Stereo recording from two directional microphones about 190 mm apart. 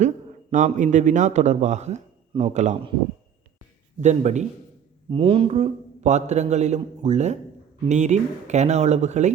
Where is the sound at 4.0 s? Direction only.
40° right (ahead or behind).